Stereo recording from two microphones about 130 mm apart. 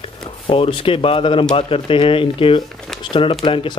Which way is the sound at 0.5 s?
45° left (ahead or behind).